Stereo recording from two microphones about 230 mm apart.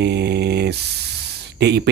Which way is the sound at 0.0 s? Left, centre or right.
Right.